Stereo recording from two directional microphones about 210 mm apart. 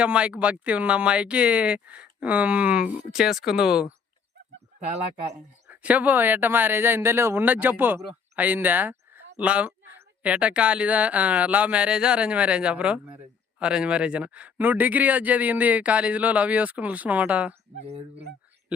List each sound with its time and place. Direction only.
0.0 s speech: 5° right (ahead or behind)
4.9 s speech: 30° right (ahead or behind)
5.6 s speech: 5° right (ahead or behind)
17.8 s speech: 30° right (ahead or behind)